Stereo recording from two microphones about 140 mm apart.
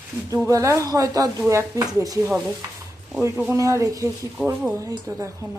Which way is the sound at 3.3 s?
10° right (ahead or behind).